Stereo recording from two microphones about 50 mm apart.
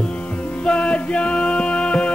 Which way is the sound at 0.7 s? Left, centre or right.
Left.